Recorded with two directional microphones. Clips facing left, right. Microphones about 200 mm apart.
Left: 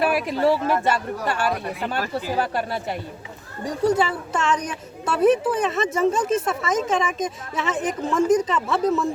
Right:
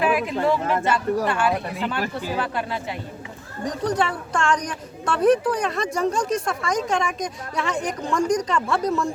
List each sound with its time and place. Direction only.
0.3 s speech: 40° left (ahead or behind)
3.7 s speech: 5° left (ahead or behind)